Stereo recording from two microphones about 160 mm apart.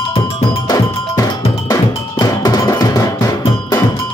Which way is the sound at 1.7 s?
25° left (ahead or behind).